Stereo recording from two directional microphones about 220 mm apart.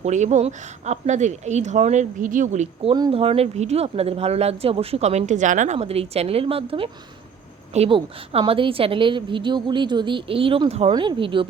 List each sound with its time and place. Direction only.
0.0 s speech: 30° right (ahead or behind)